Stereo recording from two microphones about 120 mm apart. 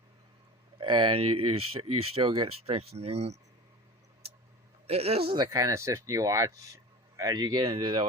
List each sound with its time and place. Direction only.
0.8 s speech: 45° right (ahead or behind); by 3.3 s 60° right (ahead or behind)
4.9 s a man's voice: 55° right (ahead or behind)
5.5 s speech: 30° right (ahead or behind)